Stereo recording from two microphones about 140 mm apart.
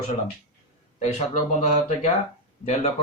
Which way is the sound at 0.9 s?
60° left (ahead or behind).